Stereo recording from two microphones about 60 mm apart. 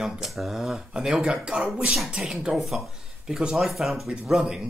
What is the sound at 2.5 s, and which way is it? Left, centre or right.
Speech, centre.